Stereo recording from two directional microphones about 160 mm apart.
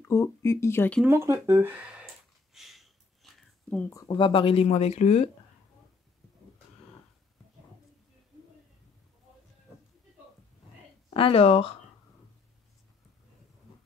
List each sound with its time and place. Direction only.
0.0 s speech: 15° left (ahead or behind)
1.0 s speech: 15° right (ahead or behind)
2.5 s a sound: centre (ahead or behind)
3.9 s speech: 25° left (ahead or behind); by 5.3 s 45° left (ahead or behind)
11.1 s speech: 35° left (ahead or behind)